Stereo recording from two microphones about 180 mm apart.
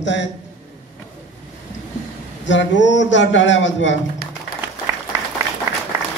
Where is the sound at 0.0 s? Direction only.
90° left.